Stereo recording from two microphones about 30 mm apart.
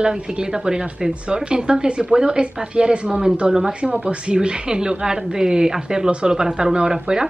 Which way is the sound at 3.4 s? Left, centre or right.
Right.